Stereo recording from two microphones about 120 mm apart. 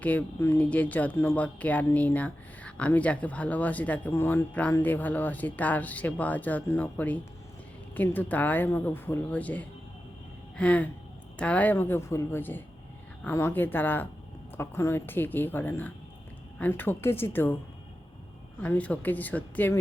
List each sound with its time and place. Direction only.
0.0 s speech: 15° left (ahead or behind)
18.6 s speech: 10° left (ahead or behind)